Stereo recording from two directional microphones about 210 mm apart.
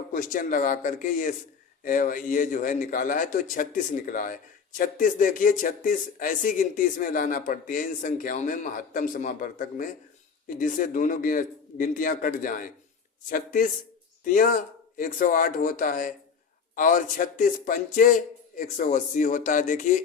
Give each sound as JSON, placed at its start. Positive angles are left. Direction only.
{"t": 0.1, "sound": "speech", "side_deg": 40}